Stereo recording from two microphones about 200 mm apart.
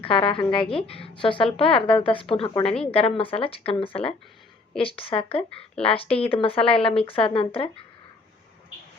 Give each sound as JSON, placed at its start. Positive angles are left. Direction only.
{"t": 0.0, "sound": "a woman's voice", "side_deg": 25}